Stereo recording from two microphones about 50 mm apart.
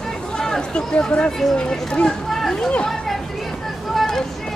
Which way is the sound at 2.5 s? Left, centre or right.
Centre.